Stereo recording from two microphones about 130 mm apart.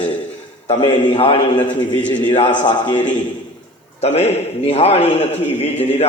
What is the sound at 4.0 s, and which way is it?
A man's voice, 50° left (ahead or behind).